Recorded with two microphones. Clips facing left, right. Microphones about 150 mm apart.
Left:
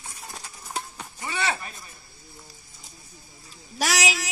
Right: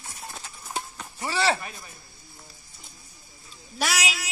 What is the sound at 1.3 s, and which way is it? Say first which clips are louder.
Speech: right 4 dB; 70° right (ahead or behind).